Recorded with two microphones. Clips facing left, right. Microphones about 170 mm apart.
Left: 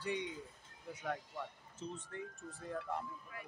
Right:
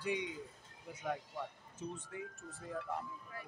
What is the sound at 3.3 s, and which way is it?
Speech, 35° right (ahead or behind).